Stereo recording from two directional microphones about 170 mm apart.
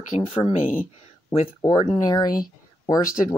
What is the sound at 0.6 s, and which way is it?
Speech, 50° left (ahead or behind).